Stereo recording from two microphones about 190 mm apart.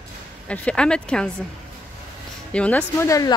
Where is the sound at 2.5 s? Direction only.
5° left (ahead or behind).